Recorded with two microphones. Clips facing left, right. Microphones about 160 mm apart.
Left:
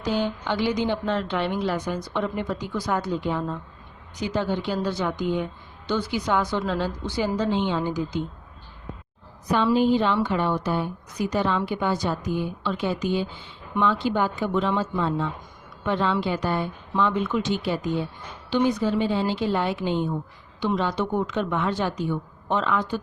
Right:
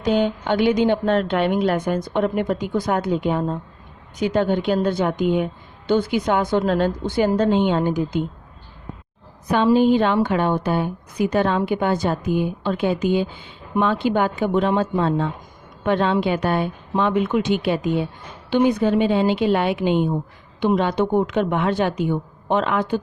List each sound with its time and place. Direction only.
0.0 s a woman's voice: 55° right (ahead or behind)
9.9 s a woman's voice: 60° right (ahead or behind)
18.5 s a woman's voice: 60° right (ahead or behind)
20.6 s a woman's voice: 55° right (ahead or behind)